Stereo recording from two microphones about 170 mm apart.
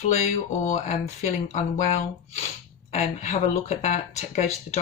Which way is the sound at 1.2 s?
45° left (ahead or behind).